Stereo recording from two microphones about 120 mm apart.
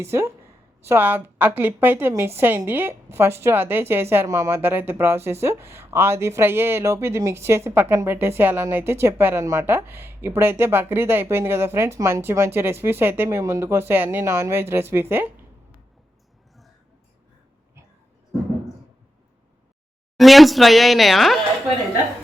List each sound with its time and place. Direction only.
0.0 s a woman's voice: 20° right (ahead or behind)
20.1 s speech: centre (ahead or behind)